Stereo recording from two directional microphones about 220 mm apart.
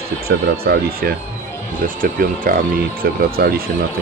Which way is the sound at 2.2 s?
40° right (ahead or behind).